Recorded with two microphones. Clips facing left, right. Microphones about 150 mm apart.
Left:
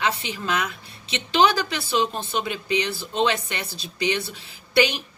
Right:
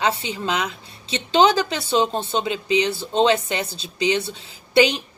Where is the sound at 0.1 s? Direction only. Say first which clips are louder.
Right 2 dB; 25° right (ahead or behind).